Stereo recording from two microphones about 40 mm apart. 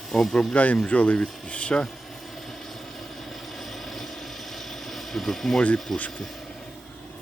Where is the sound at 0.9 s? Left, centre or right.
Left.